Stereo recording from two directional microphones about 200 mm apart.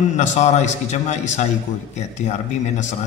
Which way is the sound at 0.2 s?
35° left (ahead or behind).